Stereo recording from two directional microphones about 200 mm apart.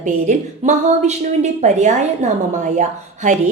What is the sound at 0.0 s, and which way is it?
A woman's voice, 35° right (ahead or behind).